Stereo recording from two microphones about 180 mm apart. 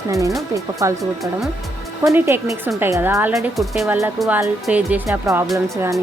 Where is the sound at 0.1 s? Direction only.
20° right (ahead or behind).